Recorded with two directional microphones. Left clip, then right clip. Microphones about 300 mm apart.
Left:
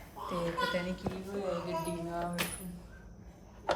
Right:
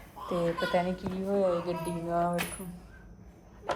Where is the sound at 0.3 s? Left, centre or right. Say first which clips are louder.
Right 4 dB; centre.